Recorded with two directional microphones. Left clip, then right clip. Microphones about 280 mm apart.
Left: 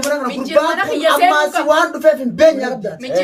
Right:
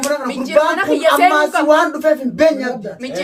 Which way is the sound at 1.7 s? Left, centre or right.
Centre.